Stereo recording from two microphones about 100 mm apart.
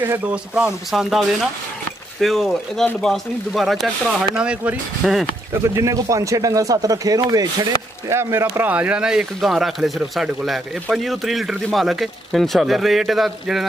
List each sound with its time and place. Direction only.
0.0 s speech: 20° right (ahead or behind)
0.3 s speech: 5° right (ahead or behind)
4.2 s speech: 10° right (ahead or behind)
5.5 s speech: 30° right (ahead or behind)
8.1 s speech: 25° right (ahead or behind)
8.7 s speech: 10° right (ahead or behind)